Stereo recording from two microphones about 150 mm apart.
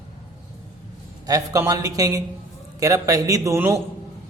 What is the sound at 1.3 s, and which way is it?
A man's voice, 25° right (ahead or behind).